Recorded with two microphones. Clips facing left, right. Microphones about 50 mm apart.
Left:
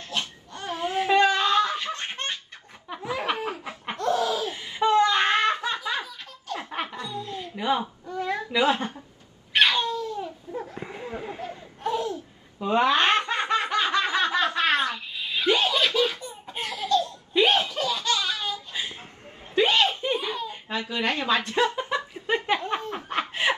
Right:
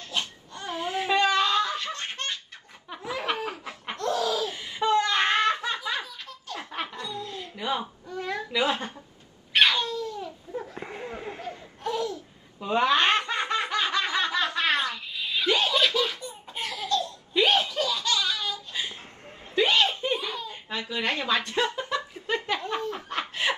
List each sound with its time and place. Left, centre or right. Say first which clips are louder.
0.2 s wail: left 2 dB; left
2.9 s laughter: left 2 dB; centre
6.7 s chuckle: even; left
8.5 s speech: left 4 dB; left
9.6 s a sound: left 1 dB; left
10.7 s a sound: left 1 dB; centre
11.4 s laughter: left 2 dB; left
12.6 s snicker: left 1 dB; left
18.7 s a sound: left 1 dB; left